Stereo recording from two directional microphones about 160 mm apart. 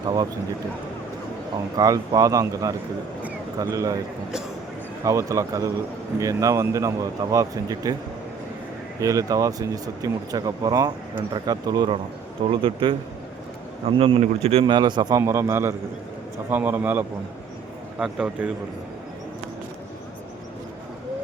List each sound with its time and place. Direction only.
1.7 s speech: 20° right (ahead or behind)
5.0 s speech: 20° right (ahead or behind)
9.0 s a man's voice: 20° right (ahead or behind); by 18.5 s 5° right (ahead or behind)